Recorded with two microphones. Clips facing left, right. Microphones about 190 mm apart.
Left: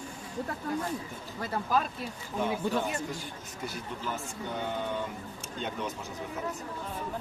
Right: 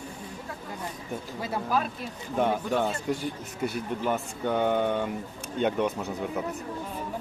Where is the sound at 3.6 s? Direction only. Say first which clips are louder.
Right 8 dB; 60° right (ahead or behind).